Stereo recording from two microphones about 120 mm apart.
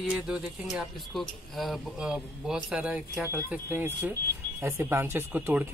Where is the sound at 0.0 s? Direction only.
5° right (ahead or behind).